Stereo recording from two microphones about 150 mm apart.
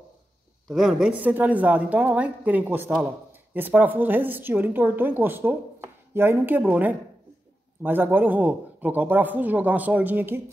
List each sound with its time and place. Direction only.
0.7 s speech: centre (ahead or behind)